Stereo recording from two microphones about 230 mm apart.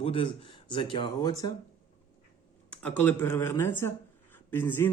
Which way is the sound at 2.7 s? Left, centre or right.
Centre.